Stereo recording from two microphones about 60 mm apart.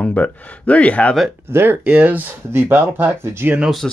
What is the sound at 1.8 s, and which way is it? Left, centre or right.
Speech, right.